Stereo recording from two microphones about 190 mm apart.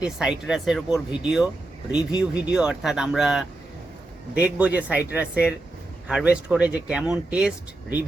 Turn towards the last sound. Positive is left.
turn(degrees=-5)  # may be behind; listen again after turning